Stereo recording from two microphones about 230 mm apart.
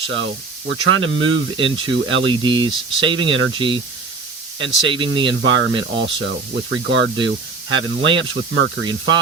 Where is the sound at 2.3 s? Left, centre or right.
Centre.